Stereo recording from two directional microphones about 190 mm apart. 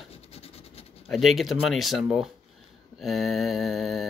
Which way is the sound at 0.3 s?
30° left (ahead or behind).